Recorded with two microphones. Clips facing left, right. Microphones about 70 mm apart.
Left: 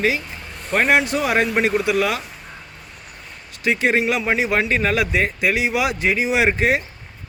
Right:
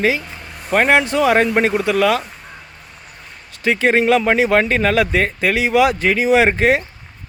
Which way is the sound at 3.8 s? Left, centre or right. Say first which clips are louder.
Right 6 dB; right.